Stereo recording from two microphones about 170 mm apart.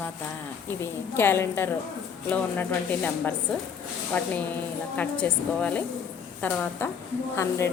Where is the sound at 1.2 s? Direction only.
15° left (ahead or behind).